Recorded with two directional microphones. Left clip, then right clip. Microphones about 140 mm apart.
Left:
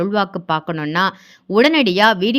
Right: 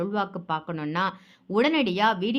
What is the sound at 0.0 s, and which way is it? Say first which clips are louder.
Speech: left 9 dB; 35° left (ahead or behind).